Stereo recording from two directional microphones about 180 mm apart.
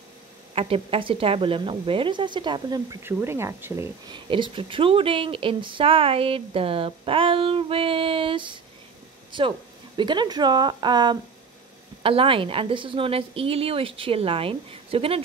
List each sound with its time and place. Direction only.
0.6 s speech: 30° right (ahead or behind); by 3.9 s 15° right (ahead or behind)
4.1 s a woman's voice: 25° right (ahead or behind)
9.9 s a woman's voice: 25° right (ahead or behind)